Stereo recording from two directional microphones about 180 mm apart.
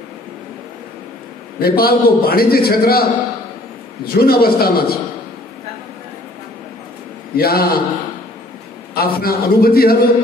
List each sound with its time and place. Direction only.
1.6 s a man's voice: 55° left (ahead or behind)
7.3 s a man's voice: 60° left (ahead or behind)
8.9 s a man's voice: 55° left (ahead or behind)